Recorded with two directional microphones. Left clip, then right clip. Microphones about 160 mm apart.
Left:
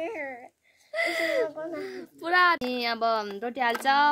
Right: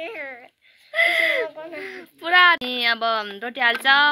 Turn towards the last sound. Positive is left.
turn(degrees=5)  # may be behind; listen again after turning